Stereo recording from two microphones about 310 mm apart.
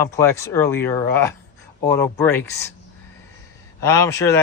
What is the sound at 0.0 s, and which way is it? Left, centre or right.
A man's voice, centre.